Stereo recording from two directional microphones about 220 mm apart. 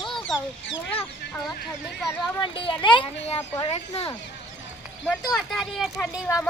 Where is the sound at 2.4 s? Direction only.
20° left (ahead or behind).